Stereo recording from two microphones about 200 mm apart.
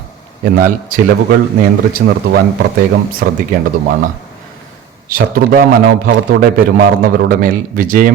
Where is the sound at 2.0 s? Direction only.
55° right (ahead or behind).